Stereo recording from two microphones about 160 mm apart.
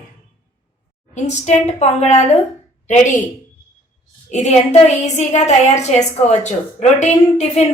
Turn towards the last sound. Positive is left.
turn(degrees=45)  # may be behind; listen again after turning